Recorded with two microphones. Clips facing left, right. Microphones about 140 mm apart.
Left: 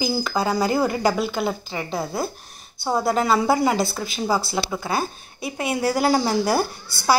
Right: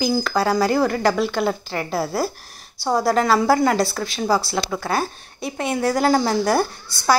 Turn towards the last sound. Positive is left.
turn(degrees=5)  # may be behind; listen again after turning